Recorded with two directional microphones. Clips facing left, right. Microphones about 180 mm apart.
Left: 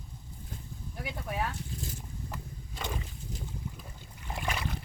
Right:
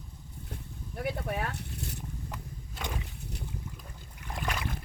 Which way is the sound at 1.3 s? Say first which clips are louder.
Even; 65° right (ahead or behind).